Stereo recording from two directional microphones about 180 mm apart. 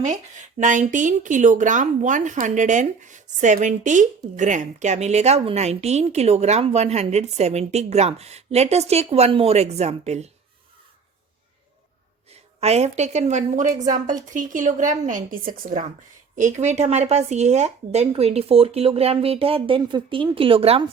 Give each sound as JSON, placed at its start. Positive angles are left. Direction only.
{"t": 0.6, "sound": "a woman's voice", "side_deg": -45}
{"t": 12.5, "sound": "a woman's voice", "side_deg": -35}